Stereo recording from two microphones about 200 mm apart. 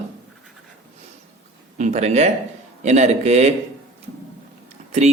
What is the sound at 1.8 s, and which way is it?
Speech, 35° right (ahead or behind).